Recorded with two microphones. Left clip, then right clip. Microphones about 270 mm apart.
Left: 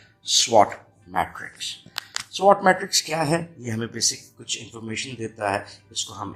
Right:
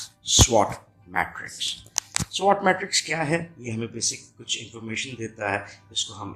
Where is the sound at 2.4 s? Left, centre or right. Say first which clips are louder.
Left 4 dB; centre.